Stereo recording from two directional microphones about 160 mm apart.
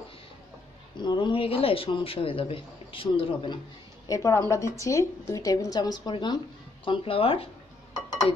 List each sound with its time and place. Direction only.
0.9 s speech: 30° left (ahead or behind)
4.1 s speech: 20° left (ahead or behind); by 7.4 s 35° left (ahead or behind)